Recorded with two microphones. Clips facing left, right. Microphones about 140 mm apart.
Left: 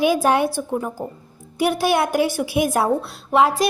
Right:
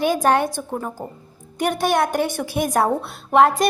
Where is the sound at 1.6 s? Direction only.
5° left (ahead or behind).